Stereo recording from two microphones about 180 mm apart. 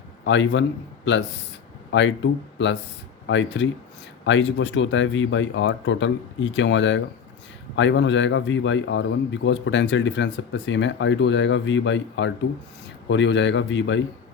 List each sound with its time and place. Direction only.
0.3 s a man's voice: 90° left
1.9 s a man's voice: 90° left